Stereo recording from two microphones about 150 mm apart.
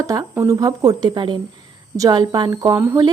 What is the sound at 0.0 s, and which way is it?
Speech, 20° right (ahead or behind).